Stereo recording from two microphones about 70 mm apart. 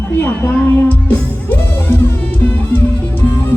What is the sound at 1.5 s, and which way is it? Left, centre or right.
Music, left.